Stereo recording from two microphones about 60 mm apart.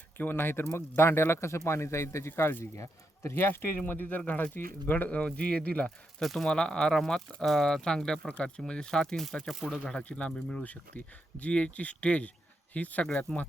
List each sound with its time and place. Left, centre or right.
0.2 s speech: left
2.7 s speech: left
3.3 s speech: left
5.0 s speech: left
6.1 s speech: centre
9.8 s speech: left